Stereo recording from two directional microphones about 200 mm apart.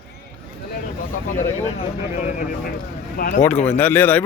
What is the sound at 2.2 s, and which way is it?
A man's voice, 40° left (ahead or behind).